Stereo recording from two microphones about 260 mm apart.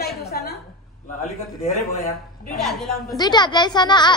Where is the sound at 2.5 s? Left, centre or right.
Centre.